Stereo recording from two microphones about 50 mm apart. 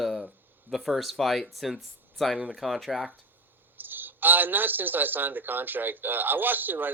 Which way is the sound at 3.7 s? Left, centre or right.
Right.